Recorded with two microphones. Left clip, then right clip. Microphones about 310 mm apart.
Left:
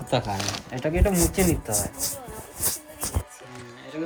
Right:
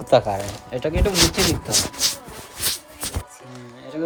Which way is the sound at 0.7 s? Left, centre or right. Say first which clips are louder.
Right 5 dB; centre.